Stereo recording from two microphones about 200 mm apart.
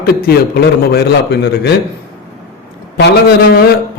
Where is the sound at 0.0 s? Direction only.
50° left (ahead or behind).